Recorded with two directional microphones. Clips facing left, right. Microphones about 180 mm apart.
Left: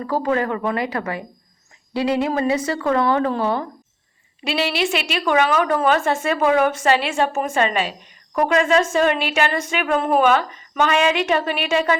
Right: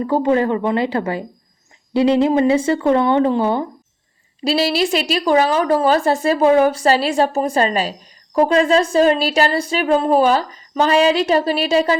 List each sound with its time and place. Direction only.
0.0 s speech: 25° right (ahead or behind)
4.4 s a woman's voice: 35° right (ahead or behind)